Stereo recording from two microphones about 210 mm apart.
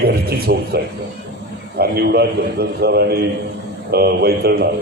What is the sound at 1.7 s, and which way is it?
A man's voice, 50° right (ahead or behind).